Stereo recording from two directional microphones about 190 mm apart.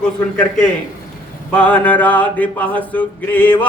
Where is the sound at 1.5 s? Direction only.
5° left (ahead or behind).